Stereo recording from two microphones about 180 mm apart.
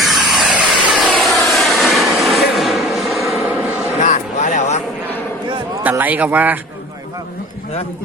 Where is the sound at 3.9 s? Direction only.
40° left (ahead or behind).